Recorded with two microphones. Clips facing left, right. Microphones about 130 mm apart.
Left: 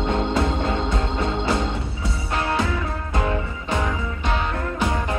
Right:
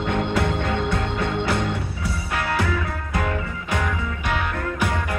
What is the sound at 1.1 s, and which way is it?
Music, 25° left (ahead or behind).